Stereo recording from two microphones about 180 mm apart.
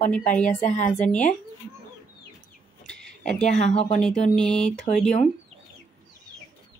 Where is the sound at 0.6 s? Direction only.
40° left (ahead or behind).